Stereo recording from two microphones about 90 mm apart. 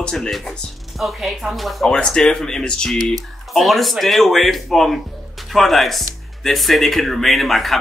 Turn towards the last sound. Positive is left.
turn(degrees=0)  # may be behind; listen again after turning